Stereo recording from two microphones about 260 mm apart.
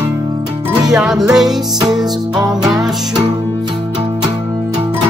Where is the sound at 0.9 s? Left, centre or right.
Centre.